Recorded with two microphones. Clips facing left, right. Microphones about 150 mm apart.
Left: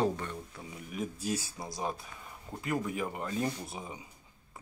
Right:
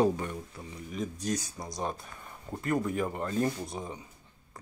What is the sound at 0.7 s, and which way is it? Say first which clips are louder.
Speech: right 2 dB; 5° left (ahead or behind).